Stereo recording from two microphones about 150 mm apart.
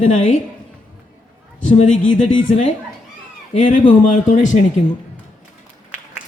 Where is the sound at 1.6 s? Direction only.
55° left (ahead or behind).